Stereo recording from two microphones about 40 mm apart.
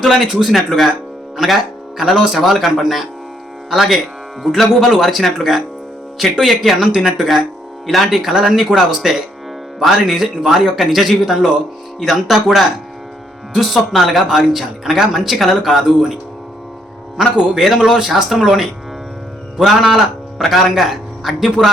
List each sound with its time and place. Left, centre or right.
0.0 s speech: centre
0.5 s a man's voice: centre
6.7 s a man's voice: centre
8.9 s a man's voice: centre
17.2 s a man's voice: centre